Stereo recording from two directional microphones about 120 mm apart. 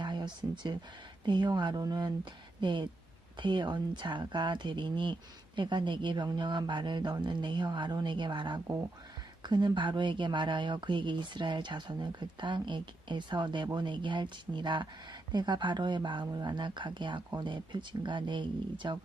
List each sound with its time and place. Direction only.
0.0 s speech: 40° right (ahead or behind)